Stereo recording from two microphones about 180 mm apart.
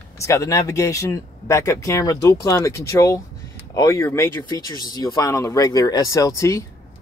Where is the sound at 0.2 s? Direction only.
15° left (ahead or behind).